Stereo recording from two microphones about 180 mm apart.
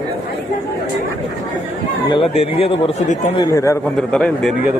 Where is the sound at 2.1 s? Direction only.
30° left (ahead or behind).